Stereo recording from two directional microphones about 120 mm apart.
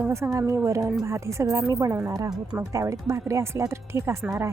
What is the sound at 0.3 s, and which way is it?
Speech, 25° right (ahead or behind).